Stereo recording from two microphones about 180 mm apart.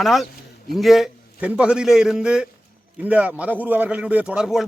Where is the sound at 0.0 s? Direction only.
Centre (ahead or behind).